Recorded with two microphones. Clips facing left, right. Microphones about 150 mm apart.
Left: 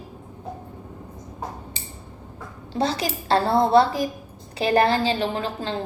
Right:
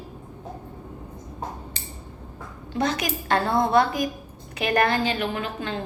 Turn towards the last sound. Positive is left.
turn(degrees=30)  # may be behind; listen again after turning